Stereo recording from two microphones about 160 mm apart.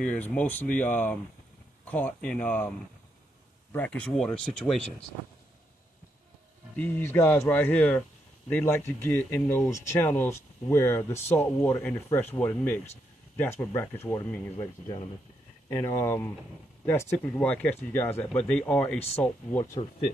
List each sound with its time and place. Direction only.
0.0 s speech: 10° left (ahead or behind)
3.7 s speech: 10° left (ahead or behind)
6.8 s speech: 15° left (ahead or behind)